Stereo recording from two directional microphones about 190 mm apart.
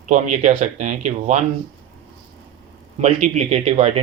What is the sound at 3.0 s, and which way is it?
Speech, 35° right (ahead or behind).